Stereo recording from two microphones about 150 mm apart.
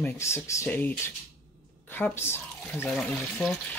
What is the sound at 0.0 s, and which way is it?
Speech, 20° left (ahead or behind).